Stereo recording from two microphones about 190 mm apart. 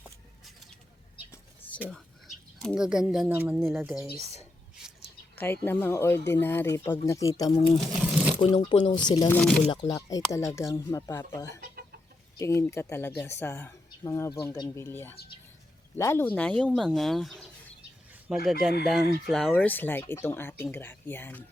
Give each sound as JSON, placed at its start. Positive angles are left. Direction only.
{"t": 1.9, "sound": "speech", "side_deg": 5}
{"t": 5.4, "sound": "speech", "side_deg": 10}
{"t": 7.6, "sound": "crumpling", "side_deg": 0}
{"t": 8.4, "sound": "speech", "side_deg": 25}
{"t": 9.3, "sound": "speech", "side_deg": 5}
{"t": 9.6, "sound": "speech", "side_deg": 25}